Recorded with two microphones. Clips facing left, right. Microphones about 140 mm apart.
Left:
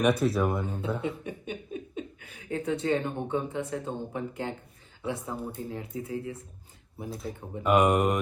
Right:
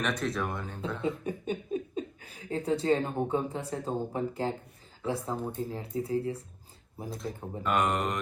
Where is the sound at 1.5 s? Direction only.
35° right (ahead or behind).